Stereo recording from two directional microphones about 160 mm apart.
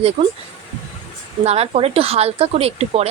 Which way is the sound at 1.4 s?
40° right (ahead or behind).